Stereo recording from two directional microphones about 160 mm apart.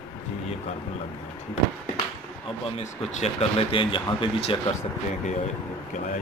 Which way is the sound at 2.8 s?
40° left (ahead or behind).